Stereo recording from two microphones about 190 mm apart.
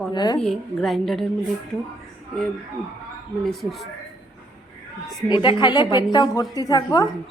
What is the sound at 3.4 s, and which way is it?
Speech, centre (ahead or behind).